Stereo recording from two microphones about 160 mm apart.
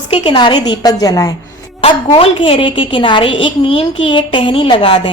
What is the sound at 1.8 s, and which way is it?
A woman's voice, 35° left (ahead or behind).